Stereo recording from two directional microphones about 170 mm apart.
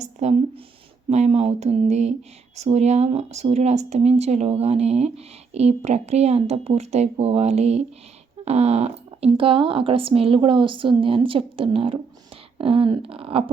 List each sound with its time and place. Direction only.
0.0 s speech: 40° right (ahead or behind)